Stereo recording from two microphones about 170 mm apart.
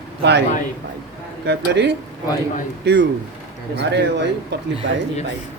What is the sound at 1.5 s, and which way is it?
Speech, 85° right.